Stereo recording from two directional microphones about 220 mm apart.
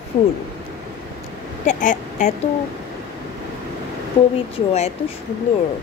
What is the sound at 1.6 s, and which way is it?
Speech, 35° left (ahead or behind).